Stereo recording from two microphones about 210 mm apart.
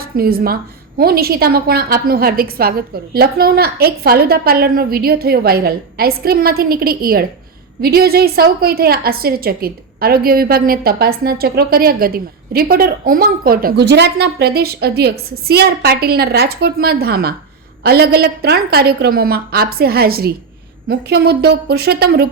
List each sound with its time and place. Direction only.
0.0 s a woman's voice: 45° right (ahead or behind)